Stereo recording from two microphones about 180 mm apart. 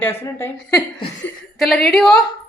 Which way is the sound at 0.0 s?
15° left (ahead or behind).